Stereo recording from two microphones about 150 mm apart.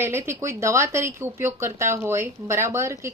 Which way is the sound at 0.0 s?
15° right (ahead or behind).